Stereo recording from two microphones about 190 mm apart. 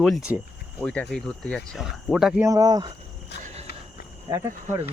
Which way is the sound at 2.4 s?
15° right (ahead or behind).